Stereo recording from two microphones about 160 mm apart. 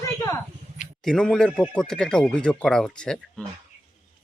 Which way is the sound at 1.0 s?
5° left (ahead or behind).